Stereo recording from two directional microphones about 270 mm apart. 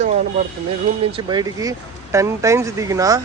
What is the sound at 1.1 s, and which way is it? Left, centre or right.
Speech, centre.